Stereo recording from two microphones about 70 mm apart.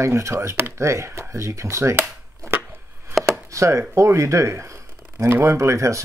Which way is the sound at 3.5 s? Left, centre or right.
Right.